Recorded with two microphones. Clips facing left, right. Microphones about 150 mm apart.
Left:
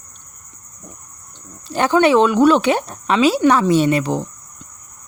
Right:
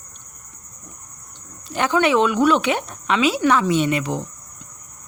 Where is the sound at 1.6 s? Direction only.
35° left (ahead or behind).